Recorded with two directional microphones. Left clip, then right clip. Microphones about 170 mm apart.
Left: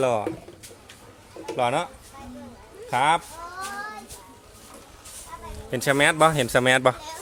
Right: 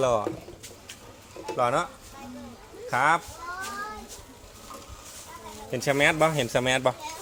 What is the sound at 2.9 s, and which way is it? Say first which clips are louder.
Speech: left 2 dB; 50° left (ahead or behind).